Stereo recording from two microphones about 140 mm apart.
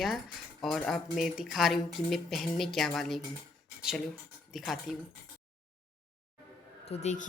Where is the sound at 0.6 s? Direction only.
5° left (ahead or behind).